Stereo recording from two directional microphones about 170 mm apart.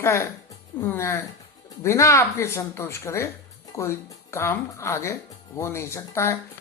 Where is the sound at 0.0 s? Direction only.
15° left (ahead or behind).